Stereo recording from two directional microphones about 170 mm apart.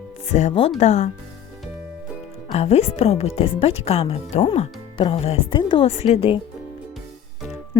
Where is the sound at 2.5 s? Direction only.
40° left (ahead or behind).